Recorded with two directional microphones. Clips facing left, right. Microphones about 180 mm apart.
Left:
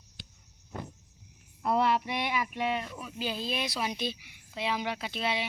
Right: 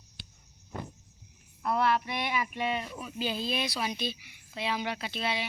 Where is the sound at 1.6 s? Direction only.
25° left (ahead or behind).